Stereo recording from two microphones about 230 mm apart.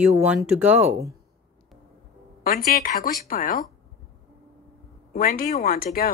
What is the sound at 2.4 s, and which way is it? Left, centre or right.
Speech, left.